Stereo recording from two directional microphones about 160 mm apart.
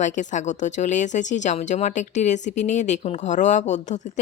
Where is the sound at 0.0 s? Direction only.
50° left (ahead or behind).